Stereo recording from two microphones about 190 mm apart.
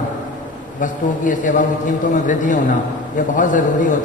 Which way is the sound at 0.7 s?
40° left (ahead or behind).